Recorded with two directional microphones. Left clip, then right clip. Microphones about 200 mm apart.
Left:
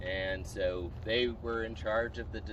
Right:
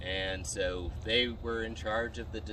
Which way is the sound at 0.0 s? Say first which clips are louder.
Even; 60° right (ahead or behind).